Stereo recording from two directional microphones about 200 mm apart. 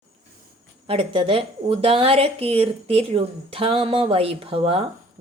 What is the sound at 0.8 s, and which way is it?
Speech, 25° right (ahead or behind).